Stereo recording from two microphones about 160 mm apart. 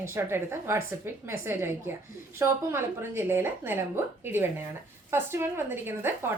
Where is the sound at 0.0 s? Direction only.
15° right (ahead or behind).